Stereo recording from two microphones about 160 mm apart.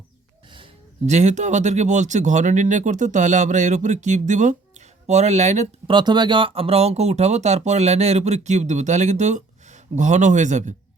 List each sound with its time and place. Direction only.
1.0 s speech: 45° right (ahead or behind)
5.9 s speech: 30° right (ahead or behind); by 10.8 s 50° right (ahead or behind)